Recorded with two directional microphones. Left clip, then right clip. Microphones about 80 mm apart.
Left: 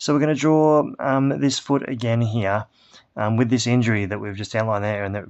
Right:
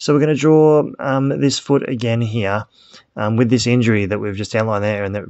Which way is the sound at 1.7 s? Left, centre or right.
Right.